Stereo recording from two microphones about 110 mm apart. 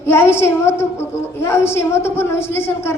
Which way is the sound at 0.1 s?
20° left (ahead or behind).